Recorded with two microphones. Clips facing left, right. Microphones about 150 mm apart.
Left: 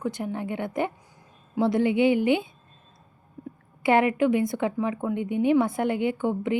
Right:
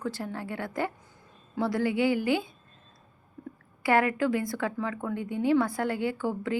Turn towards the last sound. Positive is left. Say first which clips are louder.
# left 4 dB
turn(degrees=20)  # may be behind; listen again after turning